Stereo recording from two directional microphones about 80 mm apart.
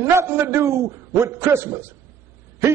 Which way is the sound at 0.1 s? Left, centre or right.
Right.